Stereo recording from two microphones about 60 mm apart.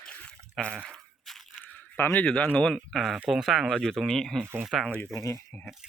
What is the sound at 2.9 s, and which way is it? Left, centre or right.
Speech, centre.